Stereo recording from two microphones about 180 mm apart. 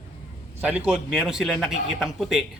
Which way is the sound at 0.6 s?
5° right (ahead or behind).